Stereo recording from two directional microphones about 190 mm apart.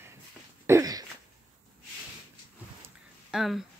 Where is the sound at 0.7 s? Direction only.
20° right (ahead or behind).